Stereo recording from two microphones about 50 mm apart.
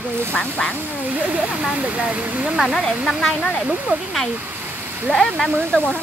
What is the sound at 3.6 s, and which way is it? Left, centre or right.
Speech, right.